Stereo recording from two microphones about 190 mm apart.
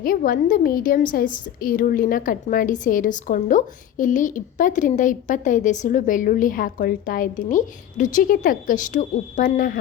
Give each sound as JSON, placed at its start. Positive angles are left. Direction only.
{"t": 0.0, "sound": "a woman's voice", "side_deg": 50}